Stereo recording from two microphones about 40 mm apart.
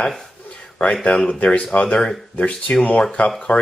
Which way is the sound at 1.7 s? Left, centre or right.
Left.